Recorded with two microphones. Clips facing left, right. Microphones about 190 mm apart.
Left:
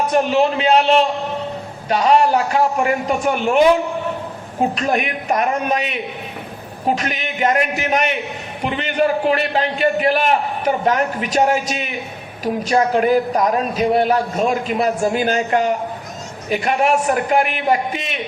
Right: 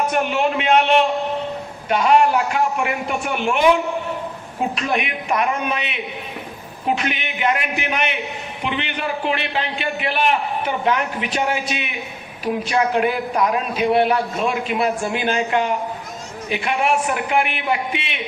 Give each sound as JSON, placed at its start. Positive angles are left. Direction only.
{"t": 0.1, "sound": "a man's voice", "side_deg": 35}
{"t": 4.7, "sound": "a man's voice", "side_deg": 40}